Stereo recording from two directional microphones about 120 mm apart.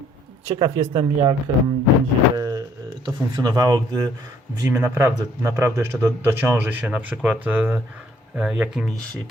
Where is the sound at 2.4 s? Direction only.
30° right (ahead or behind).